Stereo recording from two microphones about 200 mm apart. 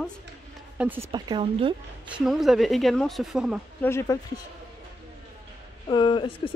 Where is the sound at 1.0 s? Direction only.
20° right (ahead or behind).